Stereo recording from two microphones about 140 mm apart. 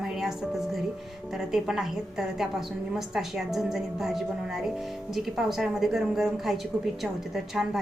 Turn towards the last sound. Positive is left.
turn(degrees=-5)  # may be behind; listen again after turning